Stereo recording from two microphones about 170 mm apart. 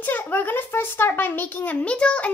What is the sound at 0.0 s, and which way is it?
Speech, 10° left (ahead or behind).